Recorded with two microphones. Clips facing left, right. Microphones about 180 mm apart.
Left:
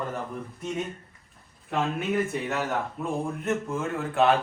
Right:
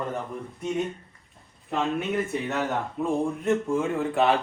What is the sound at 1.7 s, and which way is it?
A man's voice, centre (ahead or behind).